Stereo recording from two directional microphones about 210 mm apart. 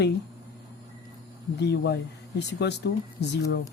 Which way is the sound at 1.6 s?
50° left (ahead or behind).